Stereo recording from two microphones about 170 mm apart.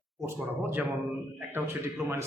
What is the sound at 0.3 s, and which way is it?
A man's voice, 10° right (ahead or behind).